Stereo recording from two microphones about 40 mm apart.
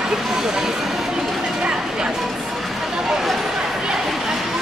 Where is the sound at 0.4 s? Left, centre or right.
Centre.